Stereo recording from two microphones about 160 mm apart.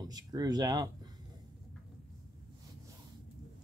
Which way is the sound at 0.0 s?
25° right (ahead or behind).